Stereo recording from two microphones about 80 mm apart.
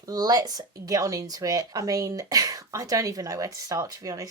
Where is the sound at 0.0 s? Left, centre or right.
Right.